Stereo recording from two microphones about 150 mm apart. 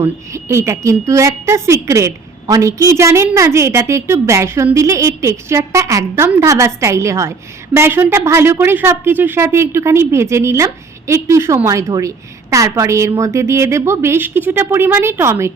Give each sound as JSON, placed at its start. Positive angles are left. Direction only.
{"t": 0.0, "sound": "a woman's voice", "side_deg": -20}